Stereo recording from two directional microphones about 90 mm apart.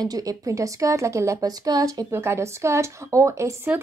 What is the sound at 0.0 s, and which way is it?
Speech, 45° right (ahead or behind).